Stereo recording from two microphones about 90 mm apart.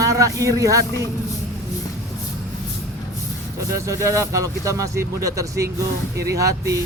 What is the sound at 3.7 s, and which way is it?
Speech, 35° right (ahead or behind).